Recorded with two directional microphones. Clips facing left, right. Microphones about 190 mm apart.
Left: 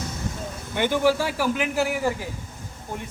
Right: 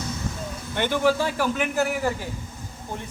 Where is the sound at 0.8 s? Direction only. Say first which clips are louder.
Left 1 dB; 10° left (ahead or behind).